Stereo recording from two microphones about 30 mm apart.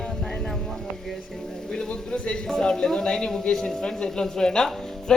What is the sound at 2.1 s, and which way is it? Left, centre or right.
Speech, left.